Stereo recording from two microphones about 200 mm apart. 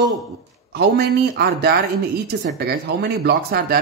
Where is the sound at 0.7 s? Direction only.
55° right (ahead or behind).